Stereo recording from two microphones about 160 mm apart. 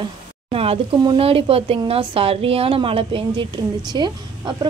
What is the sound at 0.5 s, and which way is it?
A woman's voice, 35° right (ahead or behind).